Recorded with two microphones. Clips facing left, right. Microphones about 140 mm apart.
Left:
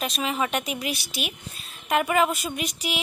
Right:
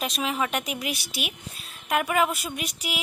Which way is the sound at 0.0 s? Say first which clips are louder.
Left 1 dB; 10° right (ahead or behind).